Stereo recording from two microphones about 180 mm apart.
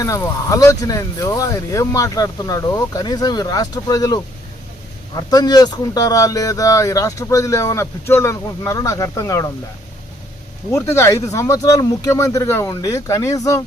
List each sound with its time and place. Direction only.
0.0 s speech: 20° left (ahead or behind)
10.7 s speech: 15° left (ahead or behind)